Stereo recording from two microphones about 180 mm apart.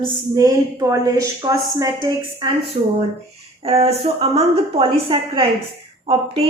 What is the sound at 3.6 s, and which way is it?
A woman's voice, 35° right (ahead or behind).